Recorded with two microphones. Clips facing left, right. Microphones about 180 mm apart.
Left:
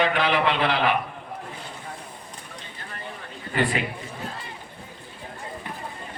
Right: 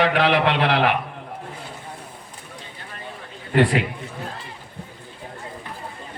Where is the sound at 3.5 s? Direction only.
75° right (ahead or behind).